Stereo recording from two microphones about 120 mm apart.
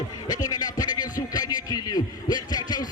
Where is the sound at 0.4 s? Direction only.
30° left (ahead or behind).